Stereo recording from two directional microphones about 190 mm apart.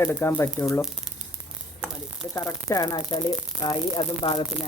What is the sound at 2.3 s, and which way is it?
Speech, 15° left (ahead or behind).